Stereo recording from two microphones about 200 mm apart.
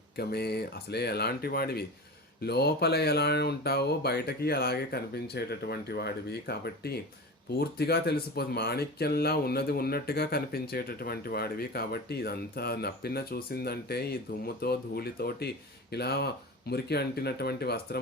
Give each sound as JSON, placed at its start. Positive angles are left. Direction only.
{"t": 0.2, "sound": "speech", "side_deg": 50}